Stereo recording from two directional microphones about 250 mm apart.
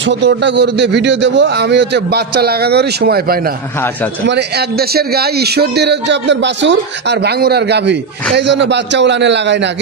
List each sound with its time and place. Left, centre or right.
0.0 s a man's voice: right